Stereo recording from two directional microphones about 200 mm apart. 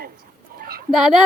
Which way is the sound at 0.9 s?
Centre (ahead or behind).